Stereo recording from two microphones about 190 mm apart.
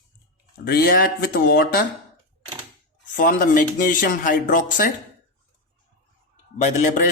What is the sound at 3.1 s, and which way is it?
Speech, 45° left (ahead or behind).